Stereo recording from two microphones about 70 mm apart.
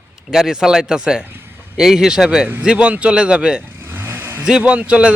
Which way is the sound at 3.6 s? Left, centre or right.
Right.